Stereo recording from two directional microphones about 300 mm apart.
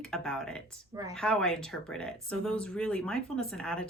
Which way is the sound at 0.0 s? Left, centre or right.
Centre.